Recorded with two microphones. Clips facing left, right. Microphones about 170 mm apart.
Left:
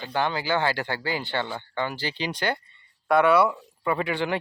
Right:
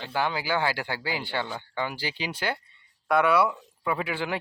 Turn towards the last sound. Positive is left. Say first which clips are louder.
# left 3 dB
turn(degrees=-5)  # may be behind; listen again after turning